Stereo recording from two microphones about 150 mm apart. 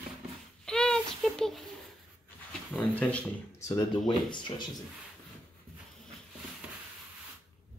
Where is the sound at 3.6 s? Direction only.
30° left (ahead or behind).